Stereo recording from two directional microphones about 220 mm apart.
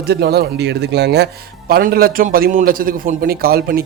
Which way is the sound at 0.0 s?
45° right (ahead or behind).